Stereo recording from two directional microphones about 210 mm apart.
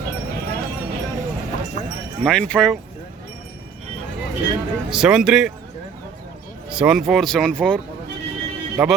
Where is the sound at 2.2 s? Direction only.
5° left (ahead or behind).